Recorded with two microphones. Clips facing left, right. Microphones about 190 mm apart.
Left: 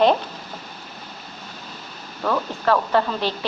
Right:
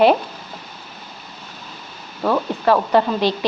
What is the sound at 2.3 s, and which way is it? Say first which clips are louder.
A woman's voice: right 3 dB; 15° right (ahead or behind).